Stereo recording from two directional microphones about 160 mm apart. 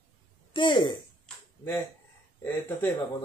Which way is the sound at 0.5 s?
30° left (ahead or behind).